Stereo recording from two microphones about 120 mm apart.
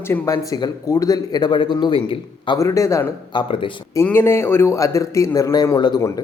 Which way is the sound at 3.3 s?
45° left (ahead or behind).